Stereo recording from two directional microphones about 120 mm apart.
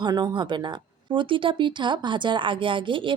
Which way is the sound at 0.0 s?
35° right (ahead or behind).